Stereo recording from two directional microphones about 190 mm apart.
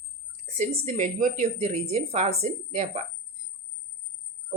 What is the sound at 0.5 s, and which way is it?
Speech, 40° right (ahead or behind).